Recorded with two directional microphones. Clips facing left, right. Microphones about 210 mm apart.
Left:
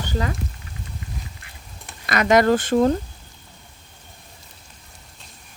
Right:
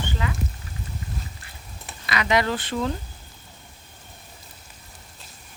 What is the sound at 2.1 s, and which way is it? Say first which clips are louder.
Speech: left 7 dB; 45° left (ahead or behind).